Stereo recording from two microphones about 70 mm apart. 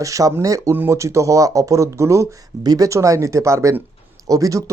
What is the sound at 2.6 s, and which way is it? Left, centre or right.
Speech, right.